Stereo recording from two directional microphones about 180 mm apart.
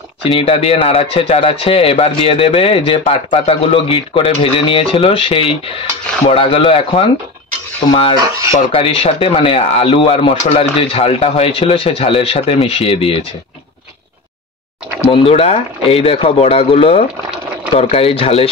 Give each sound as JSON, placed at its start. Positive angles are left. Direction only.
{"t": 0.2, "sound": "a man's voice", "side_deg": 30}
{"t": 15.0, "sound": "a man's voice", "side_deg": 30}